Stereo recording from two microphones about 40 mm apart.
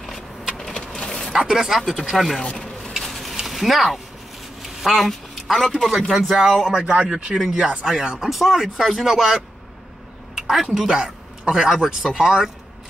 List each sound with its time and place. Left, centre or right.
0.9 s a sound: centre
1.4 s speech: centre
1.8 s speech: centre
2.5 s a sound: centre
3.4 s a man's voice: centre
6.8 s speech: right
7.3 s speech: centre
7.6 s speech: right
8.3 s speech: centre
10.3 s a sound: centre
10.6 s speech: centre